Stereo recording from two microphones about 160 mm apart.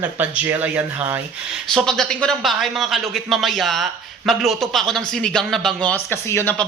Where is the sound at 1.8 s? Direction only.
5° left (ahead or behind).